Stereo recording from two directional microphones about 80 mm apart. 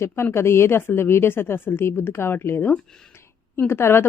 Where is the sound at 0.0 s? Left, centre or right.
Left.